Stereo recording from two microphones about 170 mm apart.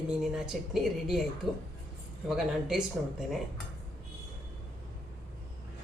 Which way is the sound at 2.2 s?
5° right (ahead or behind).